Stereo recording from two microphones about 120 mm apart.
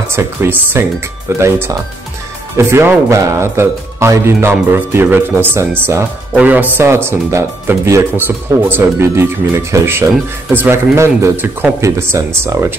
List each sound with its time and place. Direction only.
0.1 s speech: 20° right (ahead or behind)